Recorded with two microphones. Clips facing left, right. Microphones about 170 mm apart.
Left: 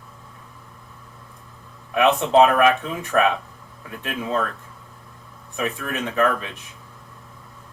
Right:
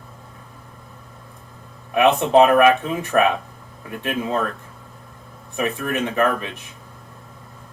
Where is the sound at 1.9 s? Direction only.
15° right (ahead or behind).